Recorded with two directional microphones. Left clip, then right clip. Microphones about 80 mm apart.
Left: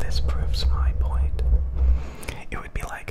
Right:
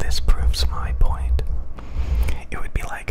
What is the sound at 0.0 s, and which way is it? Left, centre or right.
Whispering, right.